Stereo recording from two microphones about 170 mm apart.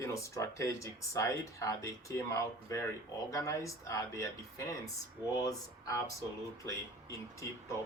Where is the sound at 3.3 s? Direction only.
20° left (ahead or behind).